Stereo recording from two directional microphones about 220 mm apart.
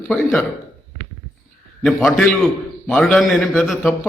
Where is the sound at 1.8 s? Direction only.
Centre (ahead or behind).